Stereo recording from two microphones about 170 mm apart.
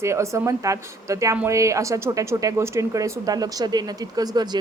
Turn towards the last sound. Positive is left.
turn(degrees=-25)  # may be behind; listen again after turning